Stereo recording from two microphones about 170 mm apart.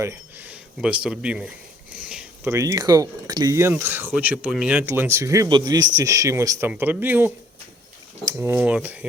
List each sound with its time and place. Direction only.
0.0 s speech: 15° right (ahead or behind)